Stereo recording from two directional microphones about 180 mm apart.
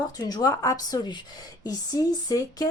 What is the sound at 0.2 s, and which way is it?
Speech, 20° left (ahead or behind).